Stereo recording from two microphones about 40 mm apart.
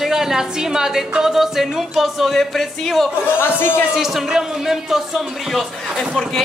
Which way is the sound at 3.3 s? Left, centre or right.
Left.